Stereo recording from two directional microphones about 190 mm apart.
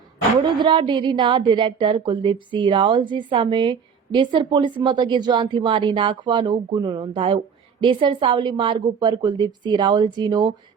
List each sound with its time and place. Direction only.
0.6 s a woman's voice: 25° right (ahead or behind)